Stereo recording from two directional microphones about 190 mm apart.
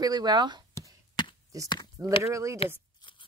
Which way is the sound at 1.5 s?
15° right (ahead or behind).